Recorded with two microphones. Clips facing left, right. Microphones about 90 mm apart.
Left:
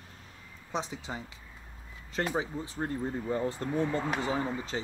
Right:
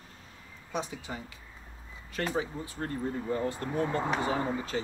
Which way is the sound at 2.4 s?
20° left (ahead or behind).